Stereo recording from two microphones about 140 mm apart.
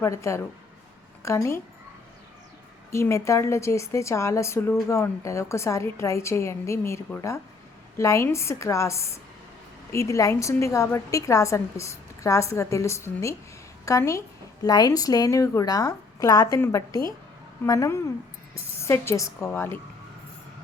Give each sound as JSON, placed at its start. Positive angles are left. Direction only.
{"t": 0.0, "sound": "a woman's voice", "side_deg": 20}
{"t": 2.9, "sound": "a woman's voice", "side_deg": 20}